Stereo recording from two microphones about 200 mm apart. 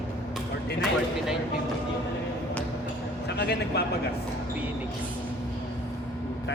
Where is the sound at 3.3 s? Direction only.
55° left (ahead or behind).